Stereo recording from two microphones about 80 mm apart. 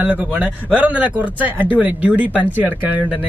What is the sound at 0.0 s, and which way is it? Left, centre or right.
Speech, centre.